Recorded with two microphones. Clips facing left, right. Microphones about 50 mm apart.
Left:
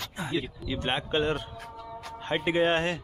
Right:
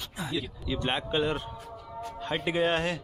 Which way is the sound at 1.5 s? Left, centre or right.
Left.